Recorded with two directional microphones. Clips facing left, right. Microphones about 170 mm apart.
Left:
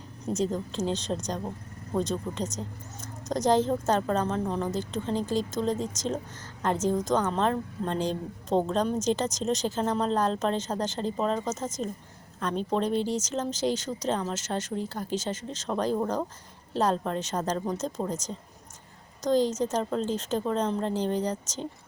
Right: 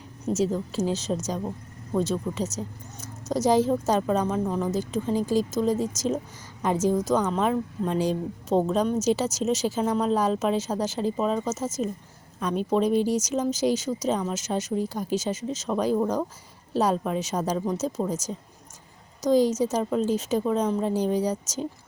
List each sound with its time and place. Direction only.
0.3 s a woman's voice: 5° right (ahead or behind)